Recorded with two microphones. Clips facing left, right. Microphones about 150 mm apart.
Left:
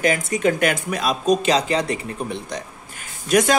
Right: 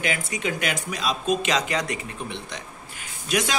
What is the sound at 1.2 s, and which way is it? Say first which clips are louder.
Speech: left 6 dB; 35° left (ahead or behind).